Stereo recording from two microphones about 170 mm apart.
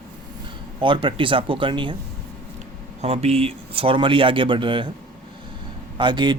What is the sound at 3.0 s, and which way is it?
Speech, 40° right (ahead or behind).